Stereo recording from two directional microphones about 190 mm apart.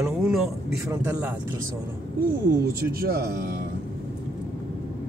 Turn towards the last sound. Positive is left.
turn(degrees=-55)  # may be behind; listen again after turning